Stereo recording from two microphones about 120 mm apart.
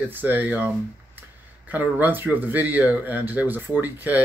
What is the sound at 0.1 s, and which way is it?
Speech, 15° right (ahead or behind).